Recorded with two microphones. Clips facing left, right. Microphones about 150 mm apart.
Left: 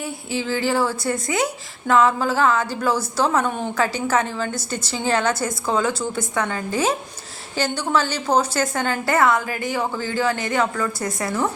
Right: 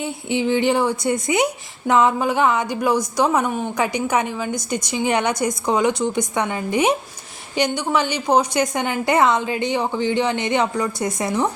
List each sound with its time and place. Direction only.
0.0 s a woman's voice: 20° right (ahead or behind)